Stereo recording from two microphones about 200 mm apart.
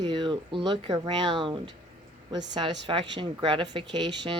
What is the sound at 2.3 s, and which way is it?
Speech, 60° right (ahead or behind).